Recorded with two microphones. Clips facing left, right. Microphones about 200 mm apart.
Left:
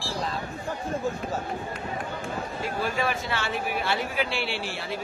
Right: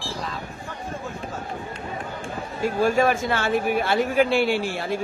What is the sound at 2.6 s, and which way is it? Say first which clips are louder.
Speech: right 10 dB; 45° right (ahead or behind).